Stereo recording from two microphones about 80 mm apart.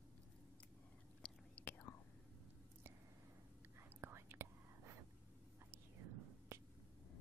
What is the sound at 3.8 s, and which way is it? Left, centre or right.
Whispering, right.